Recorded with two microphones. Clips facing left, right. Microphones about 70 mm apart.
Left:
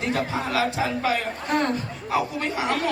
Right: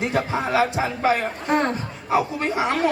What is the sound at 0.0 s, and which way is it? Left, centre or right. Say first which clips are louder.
Speech: right 3 dB; right.